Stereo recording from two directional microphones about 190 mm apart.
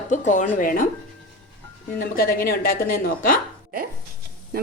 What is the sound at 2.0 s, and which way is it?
Speech, 50° left (ahead or behind).